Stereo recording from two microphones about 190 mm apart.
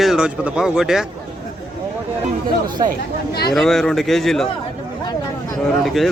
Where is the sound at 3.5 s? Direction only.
Centre (ahead or behind).